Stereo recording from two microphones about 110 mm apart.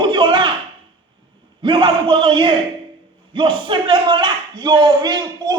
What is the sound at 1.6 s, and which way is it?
A man's voice, 50° right (ahead or behind).